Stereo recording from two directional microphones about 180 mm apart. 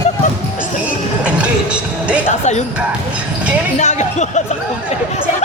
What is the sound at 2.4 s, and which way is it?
Speech, 40° left (ahead or behind).